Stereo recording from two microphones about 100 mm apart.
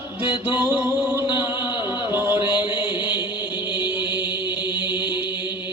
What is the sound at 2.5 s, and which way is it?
Mantra, 55° left (ahead or behind).